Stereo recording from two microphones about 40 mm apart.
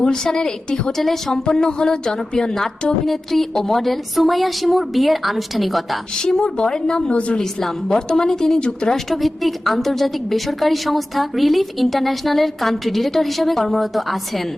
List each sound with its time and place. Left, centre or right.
0.0 s a woman's voice: centre
0.9 s a woman's voice: centre
1.3 s a woman's voice: centre
4.1 s a woman's voice: centre
6.1 s a woman's voice: centre
8.9 s a woman's voice: centre